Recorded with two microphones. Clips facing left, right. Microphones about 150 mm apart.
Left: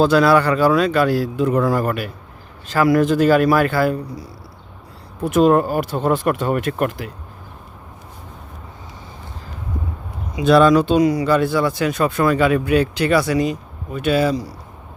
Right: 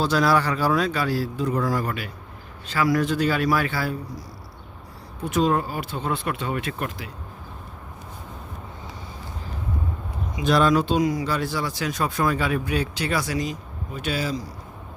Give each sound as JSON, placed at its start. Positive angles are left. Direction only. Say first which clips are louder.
{"t": 0.2, "sound": "a man's voice", "louder": "left 7 dB", "side_deg": 65}
{"t": 10.8, "sound": "speech", "louder": "left 6 dB", "side_deg": 70}